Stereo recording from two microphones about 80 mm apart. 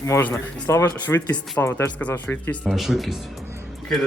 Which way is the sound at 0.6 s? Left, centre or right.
Left.